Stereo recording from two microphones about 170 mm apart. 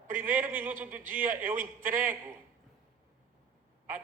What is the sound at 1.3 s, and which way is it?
Speech, 50° right (ahead or behind).